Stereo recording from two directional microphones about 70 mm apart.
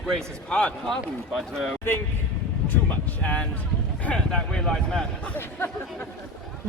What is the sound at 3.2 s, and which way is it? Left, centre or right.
Speech, centre.